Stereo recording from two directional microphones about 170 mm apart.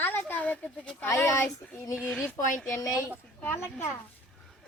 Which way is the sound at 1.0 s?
15° left (ahead or behind).